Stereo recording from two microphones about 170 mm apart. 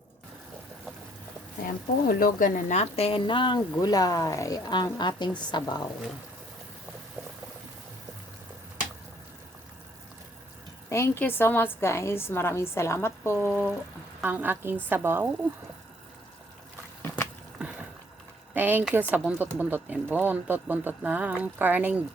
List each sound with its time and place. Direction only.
1.6 s speech: 60° left (ahead or behind); by 5.8 s 25° left (ahead or behind)
10.8 s a woman's voice: 15° left (ahead or behind)
14.2 s speech: 10° right (ahead or behind)
17.6 s a sound: 5° right (ahead or behind)
18.5 s speech: 10° right (ahead or behind)